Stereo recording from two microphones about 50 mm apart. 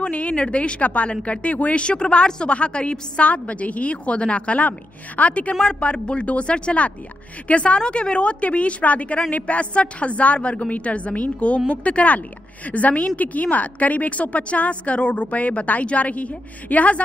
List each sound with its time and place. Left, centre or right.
0.0 s a woman's voice: left